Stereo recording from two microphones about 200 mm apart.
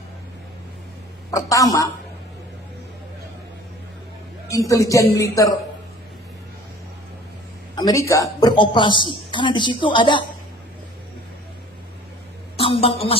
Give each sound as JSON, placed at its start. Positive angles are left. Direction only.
{"t": 1.3, "sound": "a woman's voice", "side_deg": 15}
{"t": 4.7, "sound": "speech", "side_deg": 15}
{"t": 7.8, "sound": "a woman's voice", "side_deg": 15}
{"t": 12.5, "sound": "a sound", "side_deg": 30}